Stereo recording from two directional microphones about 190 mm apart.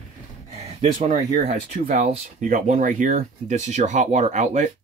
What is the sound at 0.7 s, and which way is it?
Speech, 40° right (ahead or behind).